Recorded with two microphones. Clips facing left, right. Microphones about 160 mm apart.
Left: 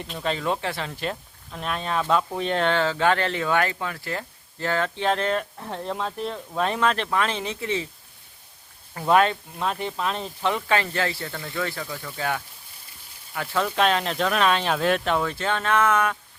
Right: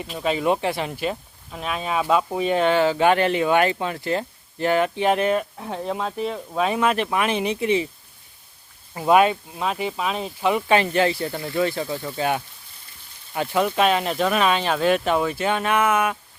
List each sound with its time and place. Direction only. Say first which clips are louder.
0.0 s speech: right 4 dB; 5° right (ahead or behind)
9.0 s speech: right 3 dB; 10° right (ahead or behind)